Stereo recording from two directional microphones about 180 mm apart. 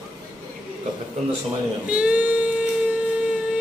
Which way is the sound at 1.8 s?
5° right (ahead or behind).